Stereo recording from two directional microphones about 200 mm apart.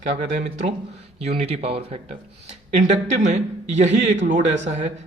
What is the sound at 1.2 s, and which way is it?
A man's voice, 30° right (ahead or behind).